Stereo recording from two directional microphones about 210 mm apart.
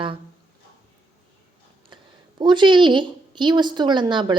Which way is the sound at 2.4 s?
20° right (ahead or behind).